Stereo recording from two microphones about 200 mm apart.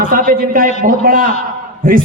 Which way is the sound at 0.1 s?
45° right (ahead or behind).